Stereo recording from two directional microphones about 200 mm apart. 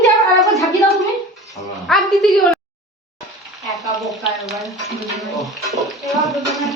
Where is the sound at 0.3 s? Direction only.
Centre (ahead or behind).